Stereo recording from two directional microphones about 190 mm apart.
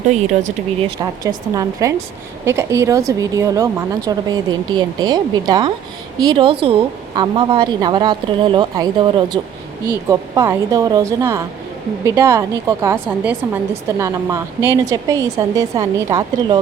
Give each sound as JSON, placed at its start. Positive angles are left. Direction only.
{"t": 1.2, "sound": "a woman's voice", "side_deg": -20}